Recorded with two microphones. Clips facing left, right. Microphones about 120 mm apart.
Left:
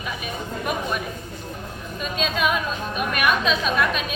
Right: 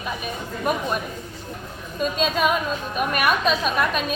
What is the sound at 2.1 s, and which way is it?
A woman's voice, 45° right (ahead or behind).